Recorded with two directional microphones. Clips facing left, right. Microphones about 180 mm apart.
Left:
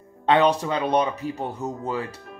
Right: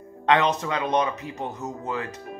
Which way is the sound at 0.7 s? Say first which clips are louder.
Left 2 dB; 30° left (ahead or behind).